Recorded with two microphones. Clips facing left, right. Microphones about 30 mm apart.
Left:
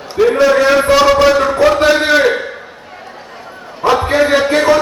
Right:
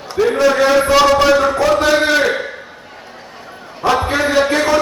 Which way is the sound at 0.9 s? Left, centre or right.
Centre.